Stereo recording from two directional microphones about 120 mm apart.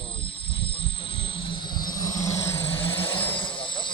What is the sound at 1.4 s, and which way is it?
Vehicle, 40° left (ahead or behind).